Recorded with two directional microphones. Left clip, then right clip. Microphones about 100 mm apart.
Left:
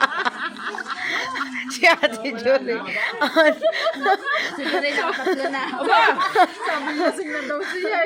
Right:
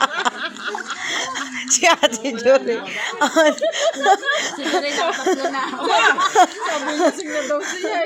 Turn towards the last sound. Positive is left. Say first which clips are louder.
# right 3 dB
turn(degrees=-35)  # may be behind; listen again after turning